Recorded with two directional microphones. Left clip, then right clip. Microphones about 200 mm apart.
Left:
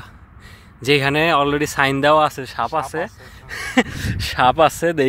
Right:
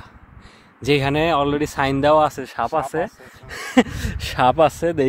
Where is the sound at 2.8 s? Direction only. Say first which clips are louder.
Right 1 dB; 30° right (ahead or behind); by 5.1 s centre (ahead or behind).